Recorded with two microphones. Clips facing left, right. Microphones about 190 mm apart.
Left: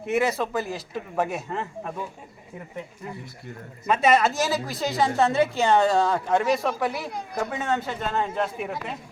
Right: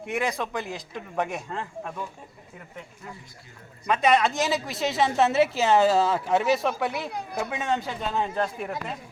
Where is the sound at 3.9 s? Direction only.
5° left (ahead or behind).